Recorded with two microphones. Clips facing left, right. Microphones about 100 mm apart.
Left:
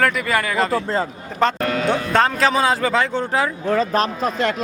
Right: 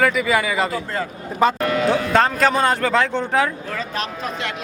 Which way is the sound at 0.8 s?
25° left (ahead or behind).